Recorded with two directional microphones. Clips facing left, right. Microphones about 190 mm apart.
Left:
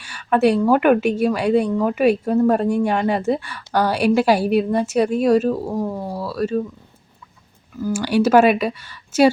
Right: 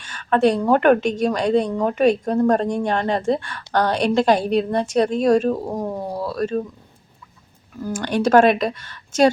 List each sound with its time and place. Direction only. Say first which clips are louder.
0.0 s a sound: left 1 dB; 10° left (ahead or behind)
0.7 s speech: even; 5° left (ahead or behind)
5.6 s speech: left 2 dB; 20° right (ahead or behind)
6.1 s speech: left 1 dB; 5° left (ahead or behind)
7.8 s speech: left 4 dB; 5° left (ahead or behind)